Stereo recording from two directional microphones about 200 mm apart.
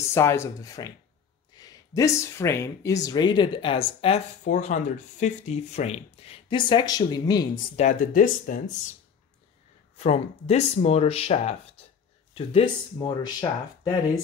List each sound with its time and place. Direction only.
0.0 s speech: 15° left (ahead or behind)
7.7 s speech: 40° left (ahead or behind)
9.9 s speech: 30° left (ahead or behind)